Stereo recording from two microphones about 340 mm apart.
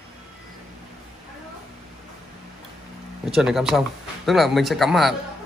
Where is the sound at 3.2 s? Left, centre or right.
Centre.